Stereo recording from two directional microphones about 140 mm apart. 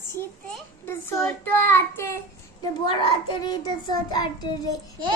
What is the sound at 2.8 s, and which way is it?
A child's voice, 35° left (ahead or behind).